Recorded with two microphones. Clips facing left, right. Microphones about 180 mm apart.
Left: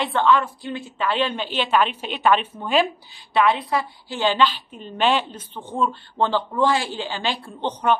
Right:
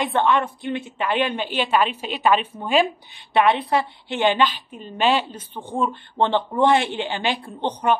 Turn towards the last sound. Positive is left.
turn(degrees=-10)  # may be behind; listen again after turning